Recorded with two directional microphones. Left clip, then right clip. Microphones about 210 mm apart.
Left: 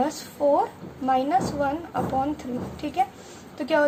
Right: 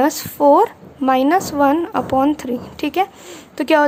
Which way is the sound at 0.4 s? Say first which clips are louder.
Right 10 dB; 45° right (ahead or behind).